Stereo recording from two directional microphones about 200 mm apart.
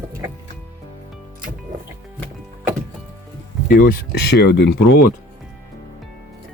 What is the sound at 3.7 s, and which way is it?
Speech, 50° left (ahead or behind).